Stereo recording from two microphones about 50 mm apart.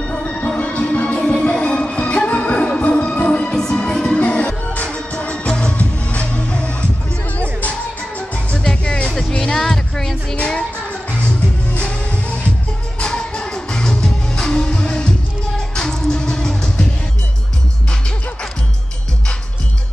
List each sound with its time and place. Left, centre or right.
0.1 s music: left
1.2 s music: centre
8.5 s music: left
10.9 s music: left
13.0 s music: centre